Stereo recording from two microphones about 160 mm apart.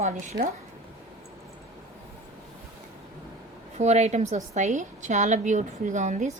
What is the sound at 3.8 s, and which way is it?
A woman's voice, 45° right (ahead or behind).